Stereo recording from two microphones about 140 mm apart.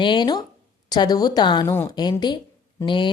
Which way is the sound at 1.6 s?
15° left (ahead or behind).